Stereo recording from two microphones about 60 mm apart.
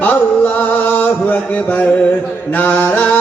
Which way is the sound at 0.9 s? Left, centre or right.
Left.